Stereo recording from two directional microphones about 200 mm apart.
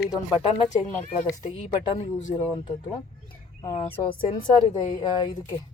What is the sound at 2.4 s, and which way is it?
Speech, 25° left (ahead or behind).